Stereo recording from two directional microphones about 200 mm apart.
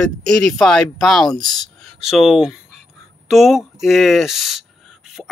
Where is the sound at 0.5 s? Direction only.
Centre (ahead or behind).